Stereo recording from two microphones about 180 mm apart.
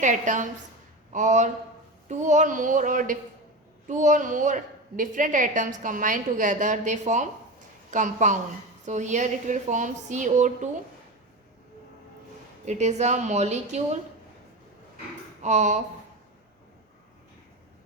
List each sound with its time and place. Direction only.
0.0 s a woman's voice: 45° right (ahead or behind)
12.6 s a woman's voice: 40° right (ahead or behind)
15.4 s speech: 40° right (ahead or behind)